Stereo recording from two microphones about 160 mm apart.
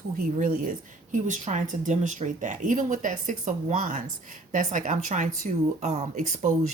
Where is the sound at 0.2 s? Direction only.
60° right (ahead or behind).